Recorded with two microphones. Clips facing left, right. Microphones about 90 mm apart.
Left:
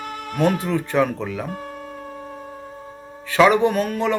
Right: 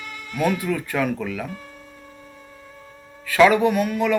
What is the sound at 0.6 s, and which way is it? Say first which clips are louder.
Music: left 3 dB; 25° left (ahead or behind).